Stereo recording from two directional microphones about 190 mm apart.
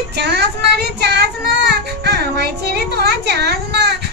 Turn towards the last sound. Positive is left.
turn(degrees=-60)  # may be behind; listen again after turning